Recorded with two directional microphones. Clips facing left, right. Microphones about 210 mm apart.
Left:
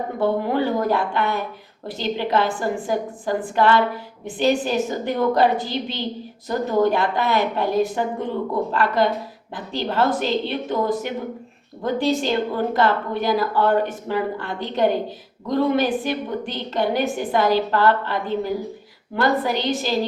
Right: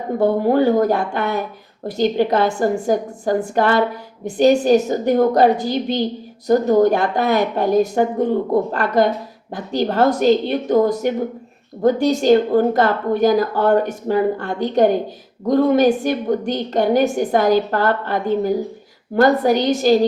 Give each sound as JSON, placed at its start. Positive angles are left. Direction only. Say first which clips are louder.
{"t": 0.2, "sound": "a woman's voice", "louder": "right 5 dB", "side_deg": -45}